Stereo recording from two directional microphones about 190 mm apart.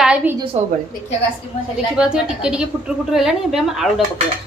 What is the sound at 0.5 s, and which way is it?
Speech, 35° right (ahead or behind).